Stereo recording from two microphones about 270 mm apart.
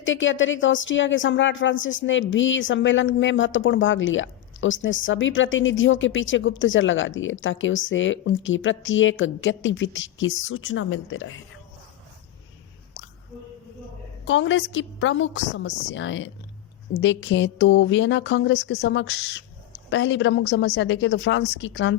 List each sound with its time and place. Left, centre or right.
0.0 s speech: left
14.3 s speech: left